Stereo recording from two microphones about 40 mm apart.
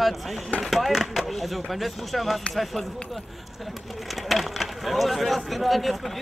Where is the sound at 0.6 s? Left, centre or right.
Centre.